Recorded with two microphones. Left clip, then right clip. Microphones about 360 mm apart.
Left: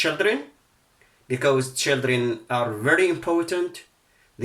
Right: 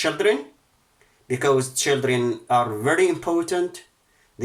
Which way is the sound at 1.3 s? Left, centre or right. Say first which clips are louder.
Right 1 dB; centre.